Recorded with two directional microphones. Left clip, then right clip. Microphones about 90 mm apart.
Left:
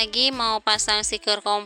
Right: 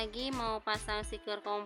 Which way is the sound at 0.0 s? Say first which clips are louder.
Left 15 dB; 50° left (ahead or behind).